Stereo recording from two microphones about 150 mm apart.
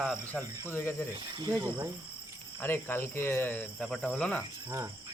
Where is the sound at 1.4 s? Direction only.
20° right (ahead or behind).